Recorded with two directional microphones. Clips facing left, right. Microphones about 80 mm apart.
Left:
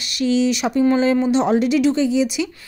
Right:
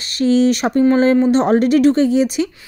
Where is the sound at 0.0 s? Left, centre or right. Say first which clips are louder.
Right 4 dB; right.